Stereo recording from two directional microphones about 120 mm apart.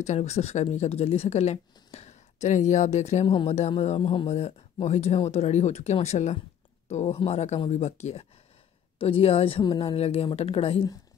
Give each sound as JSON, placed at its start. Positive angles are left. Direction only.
{"t": 0.0, "sound": "speech", "side_deg": 70}
{"t": 3.3, "sound": "speech", "side_deg": 45}
{"t": 3.5, "sound": "speech", "side_deg": 60}
{"t": 8.9, "sound": "speech", "side_deg": 50}